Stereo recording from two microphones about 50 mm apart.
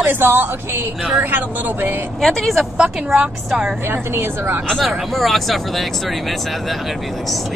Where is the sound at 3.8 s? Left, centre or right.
Right.